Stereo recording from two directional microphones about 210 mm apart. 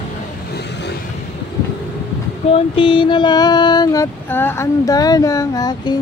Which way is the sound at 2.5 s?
25° left (ahead or behind).